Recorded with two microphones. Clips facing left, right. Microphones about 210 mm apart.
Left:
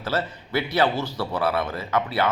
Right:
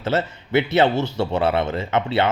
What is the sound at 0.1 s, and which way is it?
A man's voice, 25° right (ahead or behind).